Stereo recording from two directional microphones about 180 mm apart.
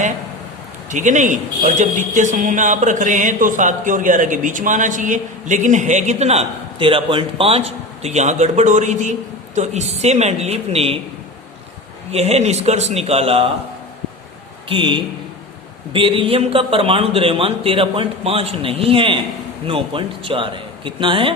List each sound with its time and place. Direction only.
0.9 s a man's voice: 45° right (ahead or behind)
12.1 s a man's voice: 35° right (ahead or behind)
14.7 s a man's voice: 30° right (ahead or behind)